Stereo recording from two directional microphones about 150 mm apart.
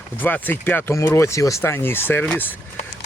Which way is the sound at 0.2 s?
10° left (ahead or behind).